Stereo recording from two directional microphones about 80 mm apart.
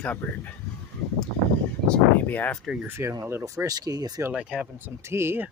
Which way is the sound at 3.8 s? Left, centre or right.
Right.